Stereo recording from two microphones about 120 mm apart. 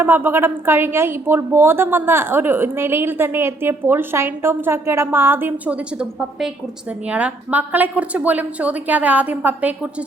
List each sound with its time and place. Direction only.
0.0 s a woman's voice: 20° right (ahead or behind)